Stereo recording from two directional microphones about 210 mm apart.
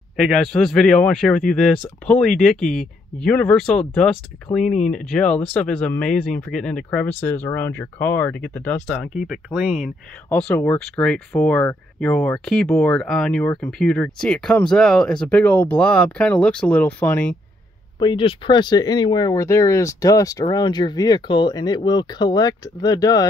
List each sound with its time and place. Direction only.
0.1 s speech: 5° left (ahead or behind)
4.6 s speech: 35° left (ahead or behind)
4.9 s speech: 5° left (ahead or behind)
10.3 s speech: 5° left (ahead or behind)
17.9 s speech: 25° left (ahead or behind)